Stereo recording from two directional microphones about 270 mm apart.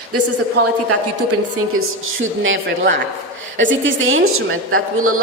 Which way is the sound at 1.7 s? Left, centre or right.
Right.